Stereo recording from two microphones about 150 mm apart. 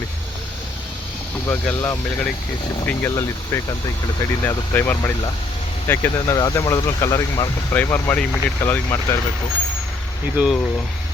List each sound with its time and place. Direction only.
1.5 s speech: 15° left (ahead or behind)
10.3 s speech: centre (ahead or behind)